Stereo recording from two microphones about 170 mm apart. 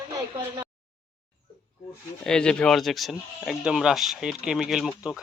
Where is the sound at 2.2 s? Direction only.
5° left (ahead or behind).